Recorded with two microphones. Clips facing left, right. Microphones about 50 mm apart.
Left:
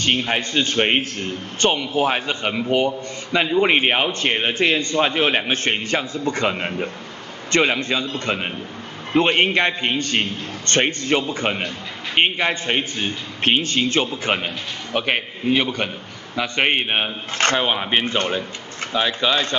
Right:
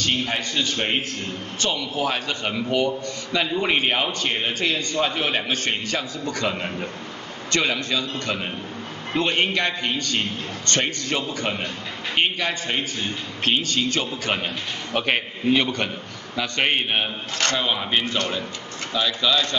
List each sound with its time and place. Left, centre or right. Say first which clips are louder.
0.0 s a man's voice: left 4 dB; left
9.1 s a man's voice: left 5 dB; left
14.4 s a man's voice: left 1 dB; centre; by 19.5 s left